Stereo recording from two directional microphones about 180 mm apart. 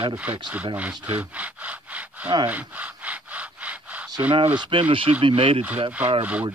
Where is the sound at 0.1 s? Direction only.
10° right (ahead or behind).